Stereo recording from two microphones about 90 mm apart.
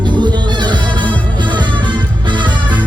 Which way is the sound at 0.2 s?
55° right (ahead or behind).